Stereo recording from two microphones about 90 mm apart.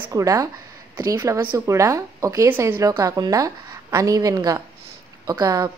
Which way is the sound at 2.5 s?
25° right (ahead or behind).